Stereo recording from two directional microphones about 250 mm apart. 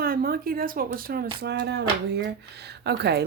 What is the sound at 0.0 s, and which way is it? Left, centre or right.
Speech, right.